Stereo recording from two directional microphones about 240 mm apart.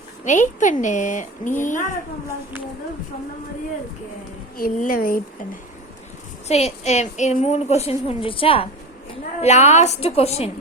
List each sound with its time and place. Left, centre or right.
0.3 s speech: left
4.5 s speech: left
6.5 s a woman's voice: left